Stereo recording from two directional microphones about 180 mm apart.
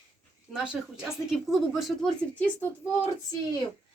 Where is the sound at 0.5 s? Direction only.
5° right (ahead or behind).